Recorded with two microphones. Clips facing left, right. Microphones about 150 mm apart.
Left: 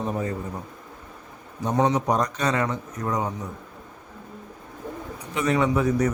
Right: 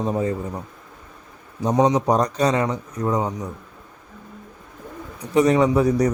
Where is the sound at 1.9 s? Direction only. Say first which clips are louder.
Right 4 dB; 35° right (ahead or behind).